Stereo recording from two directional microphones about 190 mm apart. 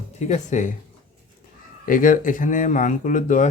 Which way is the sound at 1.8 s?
45° left (ahead or behind).